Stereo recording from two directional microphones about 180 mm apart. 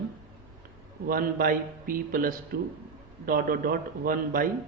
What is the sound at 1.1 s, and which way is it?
A man's voice, 50° right (ahead or behind).